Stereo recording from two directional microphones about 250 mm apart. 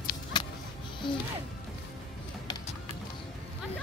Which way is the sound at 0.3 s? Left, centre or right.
Centre.